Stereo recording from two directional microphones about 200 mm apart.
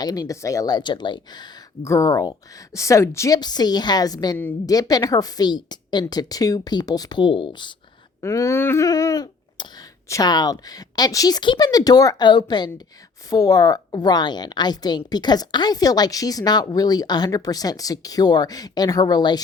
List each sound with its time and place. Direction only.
0.0 s a woman's voice: 20° left (ahead or behind)